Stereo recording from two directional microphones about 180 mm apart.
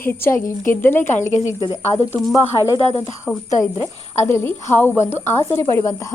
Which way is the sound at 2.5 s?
25° left (ahead or behind).